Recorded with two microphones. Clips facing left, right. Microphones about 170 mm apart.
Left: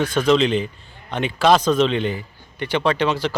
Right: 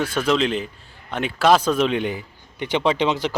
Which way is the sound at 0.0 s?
5° right (ahead or behind).